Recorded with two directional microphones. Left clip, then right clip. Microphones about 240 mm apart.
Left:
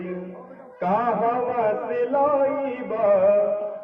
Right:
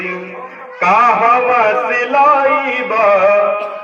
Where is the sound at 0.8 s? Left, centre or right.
Centre.